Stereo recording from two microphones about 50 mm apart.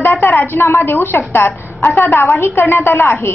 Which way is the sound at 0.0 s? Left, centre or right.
Left.